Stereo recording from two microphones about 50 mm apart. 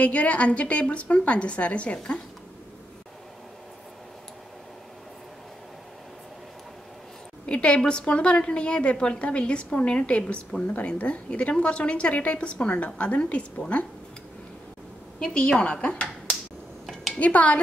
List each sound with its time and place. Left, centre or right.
0.0 s a woman's voice: left
7.4 s a woman's voice: left
15.1 s a woman's voice: centre
17.2 s a woman's voice: left